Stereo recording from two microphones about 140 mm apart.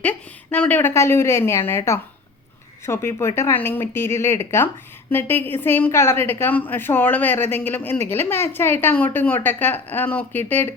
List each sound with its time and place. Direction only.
0.0 s a woman's voice: 10° left (ahead or behind)